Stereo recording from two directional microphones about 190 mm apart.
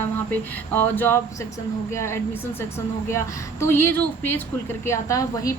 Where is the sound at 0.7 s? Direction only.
10° left (ahead or behind).